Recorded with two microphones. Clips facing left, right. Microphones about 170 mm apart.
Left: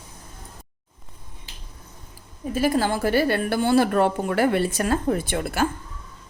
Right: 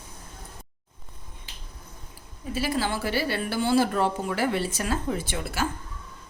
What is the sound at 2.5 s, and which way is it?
A woman's voice, 50° left (ahead or behind).